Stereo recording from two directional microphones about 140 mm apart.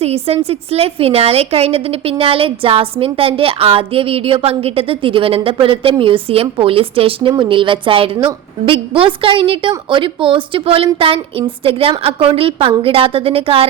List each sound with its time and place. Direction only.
0.0 s a woman's voice: 45° right (ahead or behind)